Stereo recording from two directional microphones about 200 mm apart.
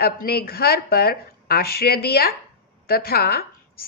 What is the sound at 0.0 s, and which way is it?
A woman's voice, 50° left (ahead or behind).